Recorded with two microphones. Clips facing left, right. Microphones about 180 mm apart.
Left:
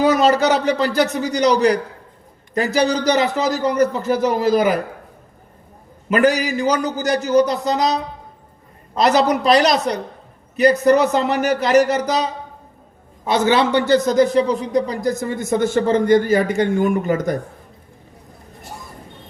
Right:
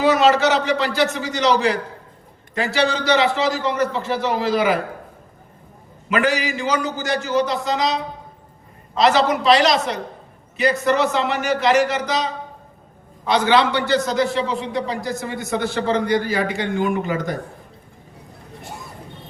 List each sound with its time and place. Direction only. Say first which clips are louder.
0.0 s a man's voice: left 1 dB; 40° left (ahead or behind)
6.1 s a man's voice: left 4 dB; 40° left (ahead or behind)
9.0 s a man's voice: left 1 dB; 40° left (ahead or behind)